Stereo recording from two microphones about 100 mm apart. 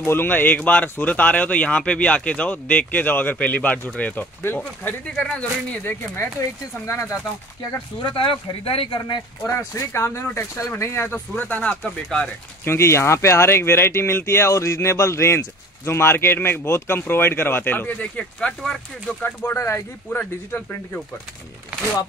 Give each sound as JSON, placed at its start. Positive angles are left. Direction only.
{"t": 0.0, "sound": "speech", "side_deg": 20}
{"t": 6.9, "sound": "speech", "side_deg": 30}
{"t": 8.0, "sound": "speech", "side_deg": 65}
{"t": 9.4, "sound": "speech", "side_deg": 30}
{"t": 12.6, "sound": "speech", "side_deg": 25}
{"t": 19.2, "sound": "speech", "side_deg": 25}
{"t": 20.1, "sound": "speech", "side_deg": 15}